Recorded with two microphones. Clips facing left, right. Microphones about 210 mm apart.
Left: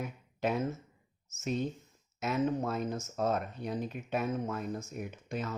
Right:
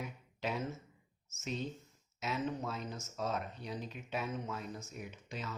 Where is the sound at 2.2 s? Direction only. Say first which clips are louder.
Left 7 dB; 50° left (ahead or behind).